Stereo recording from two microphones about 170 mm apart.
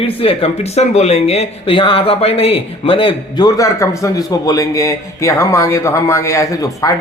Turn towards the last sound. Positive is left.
turn(degrees=20)  # may be behind; listen again after turning